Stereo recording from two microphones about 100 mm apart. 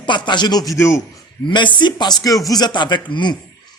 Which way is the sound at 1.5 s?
50° left (ahead or behind).